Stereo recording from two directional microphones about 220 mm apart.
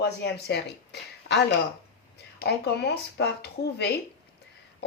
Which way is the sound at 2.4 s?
50° left (ahead or behind).